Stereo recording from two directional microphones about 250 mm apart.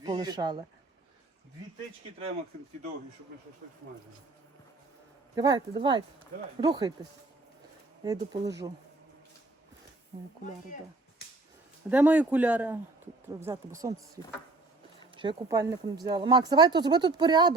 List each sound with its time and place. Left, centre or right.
0.0 s speech: centre
5.3 s speech: centre
8.0 s speech: centre
11.9 s speech: centre
15.1 s speech: centre